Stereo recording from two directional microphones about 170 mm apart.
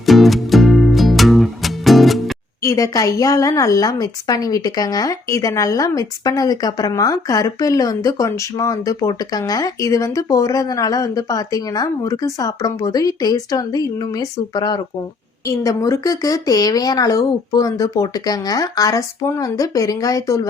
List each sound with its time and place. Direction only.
0.0 s music: centre (ahead or behind)
2.6 s a woman's voice: 20° left (ahead or behind)